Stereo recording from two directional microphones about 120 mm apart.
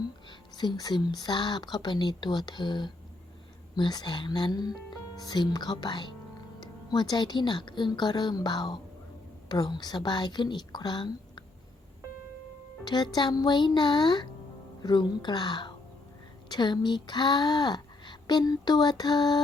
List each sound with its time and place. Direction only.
0.3 s a woman's voice: 40° left (ahead or behind)
12.8 s a woman's voice: 35° left (ahead or behind)